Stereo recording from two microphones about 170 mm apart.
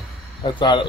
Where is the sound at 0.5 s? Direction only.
30° left (ahead or behind).